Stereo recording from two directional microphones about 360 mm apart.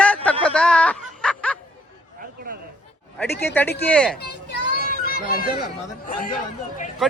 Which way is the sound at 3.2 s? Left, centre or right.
Centre.